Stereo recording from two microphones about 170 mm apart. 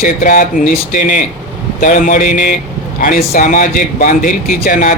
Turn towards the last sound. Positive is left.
turn(degrees=55)  # may be behind; listen again after turning